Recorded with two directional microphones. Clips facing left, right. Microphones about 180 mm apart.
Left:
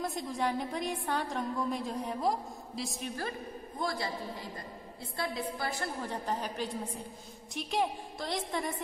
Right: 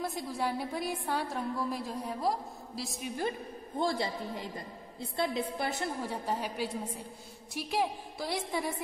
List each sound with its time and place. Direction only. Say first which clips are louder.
0.0 s a woman's voice: left 1 dB; 5° right (ahead or behind)
3.2 s a woman's voice: right 3 dB; 25° right (ahead or behind)
5.9 s a woman's voice: right 1 dB; 10° right (ahead or behind)